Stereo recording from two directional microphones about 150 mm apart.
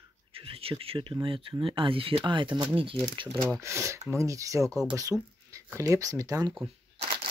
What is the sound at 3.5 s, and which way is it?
Speech, 20° right (ahead or behind).